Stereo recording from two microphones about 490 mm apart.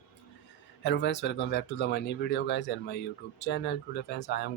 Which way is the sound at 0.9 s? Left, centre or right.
Left.